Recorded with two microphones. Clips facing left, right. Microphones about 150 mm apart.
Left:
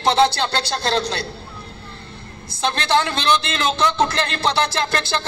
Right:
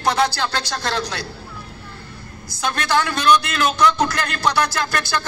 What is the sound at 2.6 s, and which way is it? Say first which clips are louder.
Music: left 1 dB; 25° left (ahead or behind).